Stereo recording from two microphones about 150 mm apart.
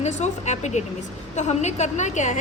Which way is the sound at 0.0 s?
50° left (ahead or behind).